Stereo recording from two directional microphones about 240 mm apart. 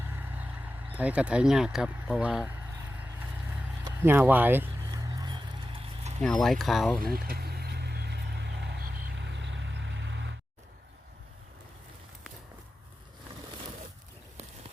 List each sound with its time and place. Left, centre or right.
0.0 s vehicle: centre
0.9 s speech: centre
3.8 s vehicle: centre; by 6.1 s right
6.2 s speech: centre
7.0 s vehicle: right